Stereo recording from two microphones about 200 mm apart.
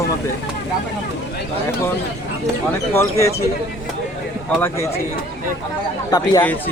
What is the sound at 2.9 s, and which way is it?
Speech, 15° left (ahead or behind).